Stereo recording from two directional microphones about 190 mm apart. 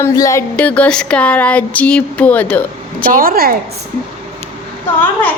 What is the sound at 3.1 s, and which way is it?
Speech, 50° right (ahead or behind).